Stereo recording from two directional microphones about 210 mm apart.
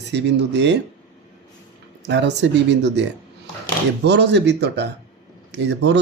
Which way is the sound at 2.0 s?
55° right (ahead or behind).